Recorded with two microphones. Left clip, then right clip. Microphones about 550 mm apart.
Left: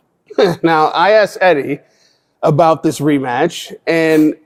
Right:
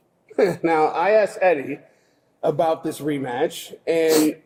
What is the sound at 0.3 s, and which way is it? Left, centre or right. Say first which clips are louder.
Speech: left 7 dB; left.